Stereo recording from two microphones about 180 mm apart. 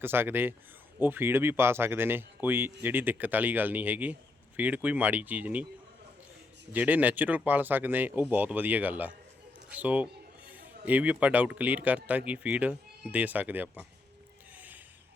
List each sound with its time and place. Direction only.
0.0 s speech: 10° right (ahead or behind)
6.7 s a man's voice: 10° right (ahead or behind)
14.5 s a sound: 10° right (ahead or behind)